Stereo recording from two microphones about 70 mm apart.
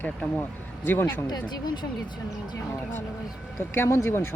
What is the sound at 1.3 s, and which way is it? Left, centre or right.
Speech, left.